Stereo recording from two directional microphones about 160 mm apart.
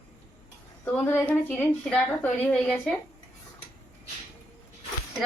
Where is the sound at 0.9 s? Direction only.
10° left (ahead or behind).